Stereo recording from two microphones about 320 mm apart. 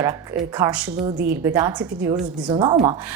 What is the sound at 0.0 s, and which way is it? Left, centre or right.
Speech, centre.